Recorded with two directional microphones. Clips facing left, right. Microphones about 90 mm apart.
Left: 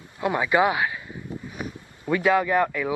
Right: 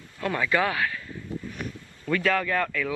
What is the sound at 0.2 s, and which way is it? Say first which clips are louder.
Speech: left 4 dB; 20° left (ahead or behind).